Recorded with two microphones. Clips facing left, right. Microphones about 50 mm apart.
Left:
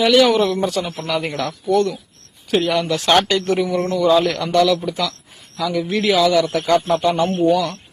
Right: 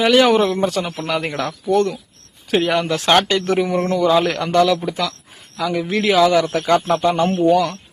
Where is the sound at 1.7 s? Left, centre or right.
Right.